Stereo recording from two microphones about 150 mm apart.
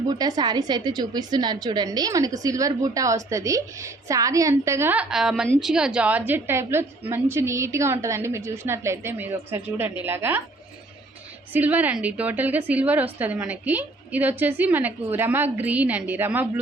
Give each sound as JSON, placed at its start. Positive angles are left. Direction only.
{"t": 0.1, "sound": "a woman's voice", "side_deg": -25}
{"t": 11.5, "sound": "a woman's voice", "side_deg": -10}